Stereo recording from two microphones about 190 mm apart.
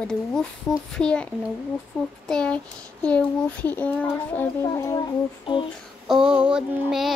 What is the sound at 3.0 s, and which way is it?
A child's voice, 5° left (ahead or behind).